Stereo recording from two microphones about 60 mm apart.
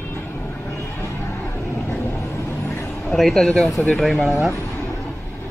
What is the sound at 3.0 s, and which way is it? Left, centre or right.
Speech, centre.